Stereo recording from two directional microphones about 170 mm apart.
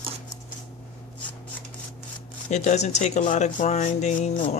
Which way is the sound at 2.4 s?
45° left (ahead or behind).